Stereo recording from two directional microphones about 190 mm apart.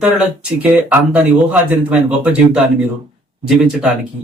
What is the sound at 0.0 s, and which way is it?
Speech, 5° right (ahead or behind).